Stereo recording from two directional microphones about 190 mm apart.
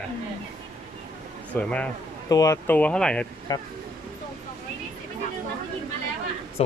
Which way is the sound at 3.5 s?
20° left (ahead or behind).